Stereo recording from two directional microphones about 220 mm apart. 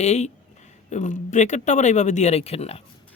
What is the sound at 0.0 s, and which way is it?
Speech, 30° left (ahead or behind).